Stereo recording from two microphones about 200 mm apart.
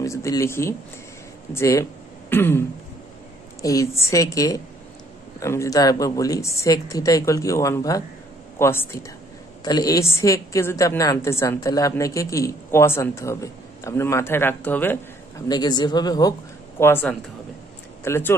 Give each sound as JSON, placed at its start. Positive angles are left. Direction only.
{"t": 0.0, "sound": "a woman's voice", "side_deg": 15}
{"t": 3.6, "sound": "a woman's voice", "side_deg": 15}